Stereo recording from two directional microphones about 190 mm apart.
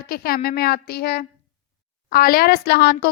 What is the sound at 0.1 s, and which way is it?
A woman's voice, 50° left (ahead or behind).